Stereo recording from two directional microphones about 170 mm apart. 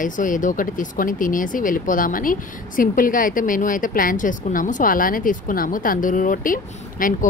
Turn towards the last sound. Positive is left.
turn(degrees=55)  # may be behind; listen again after turning